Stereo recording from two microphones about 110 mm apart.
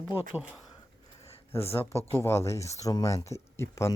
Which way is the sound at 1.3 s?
65° left (ahead or behind).